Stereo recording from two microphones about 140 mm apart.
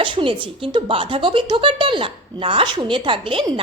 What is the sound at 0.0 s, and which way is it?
Speech, 35° right (ahead or behind).